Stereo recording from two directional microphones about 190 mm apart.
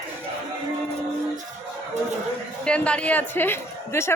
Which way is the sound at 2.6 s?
5° left (ahead or behind).